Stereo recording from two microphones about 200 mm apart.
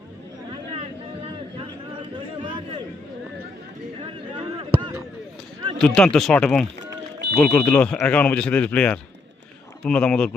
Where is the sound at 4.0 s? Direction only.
25° right (ahead or behind).